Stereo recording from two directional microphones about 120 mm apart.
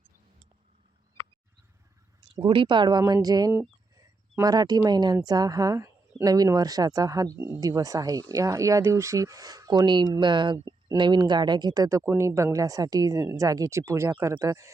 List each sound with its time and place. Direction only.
2.2 s speech: 45° right (ahead or behind); by 7.3 s 30° right (ahead or behind)
7.3 s speech: 15° right (ahead or behind)
7.6 s speech: 30° right (ahead or behind)